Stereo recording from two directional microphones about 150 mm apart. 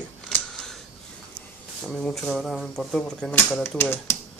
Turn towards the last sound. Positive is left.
turn(degrees=15)  # may be behind; listen again after turning